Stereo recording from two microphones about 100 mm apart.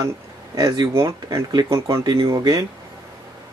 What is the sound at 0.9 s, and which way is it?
Speech, 30° right (ahead or behind).